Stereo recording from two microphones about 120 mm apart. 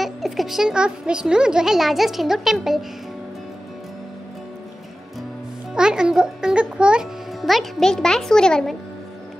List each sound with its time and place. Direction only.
0.0 s a child's voice: centre (ahead or behind)
5.8 s a child's voice: 5° right (ahead or behind)